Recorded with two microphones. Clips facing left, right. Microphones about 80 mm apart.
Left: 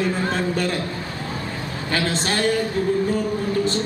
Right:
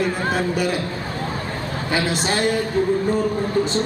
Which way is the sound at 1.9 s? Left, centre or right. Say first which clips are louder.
Right 1 dB; centre.